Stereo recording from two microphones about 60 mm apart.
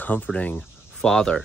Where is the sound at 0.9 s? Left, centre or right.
Centre.